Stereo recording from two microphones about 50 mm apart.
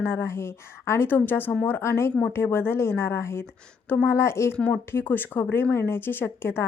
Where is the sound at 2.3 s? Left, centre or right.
Left.